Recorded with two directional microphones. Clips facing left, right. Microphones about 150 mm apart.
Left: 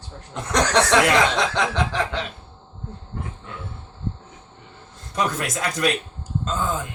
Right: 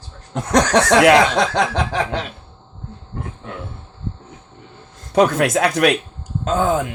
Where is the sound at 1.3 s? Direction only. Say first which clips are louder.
Right 5 dB; 45° right (ahead or behind).